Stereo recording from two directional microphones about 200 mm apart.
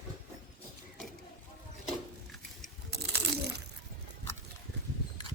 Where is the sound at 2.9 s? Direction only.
60° right (ahead or behind).